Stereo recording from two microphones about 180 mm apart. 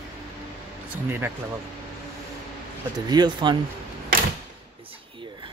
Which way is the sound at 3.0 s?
25° right (ahead or behind).